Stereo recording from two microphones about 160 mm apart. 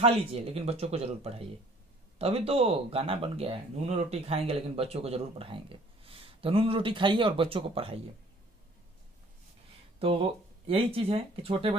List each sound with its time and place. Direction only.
0.0 s speech: 40° right (ahead or behind)
9.9 s speech: 35° right (ahead or behind)